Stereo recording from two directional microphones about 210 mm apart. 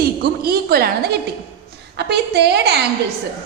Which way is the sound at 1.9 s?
50° right (ahead or behind).